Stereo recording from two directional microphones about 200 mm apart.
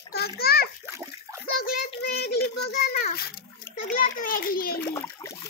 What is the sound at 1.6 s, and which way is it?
Child singing, 50° left (ahead or behind).